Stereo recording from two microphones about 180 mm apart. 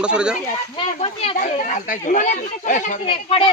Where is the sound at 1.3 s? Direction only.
45° left (ahead or behind).